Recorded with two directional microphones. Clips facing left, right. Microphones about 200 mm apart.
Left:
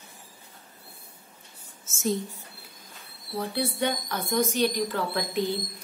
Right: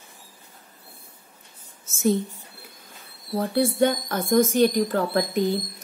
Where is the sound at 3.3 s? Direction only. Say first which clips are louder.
Right 8 dB; 45° right (ahead or behind).